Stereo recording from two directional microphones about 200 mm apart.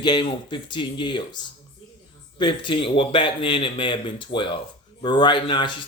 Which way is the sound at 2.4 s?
25° left (ahead or behind).